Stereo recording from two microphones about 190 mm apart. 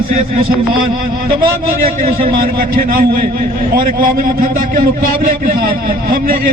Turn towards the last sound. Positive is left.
turn(degrees=-50)  # may be behind; listen again after turning